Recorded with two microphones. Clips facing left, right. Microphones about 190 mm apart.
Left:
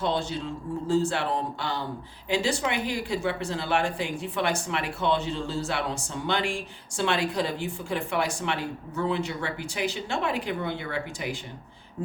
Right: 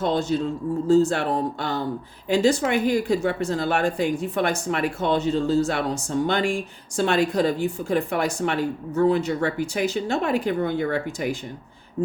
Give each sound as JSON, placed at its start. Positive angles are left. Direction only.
{"t": 0.0, "sound": "speech", "side_deg": -40}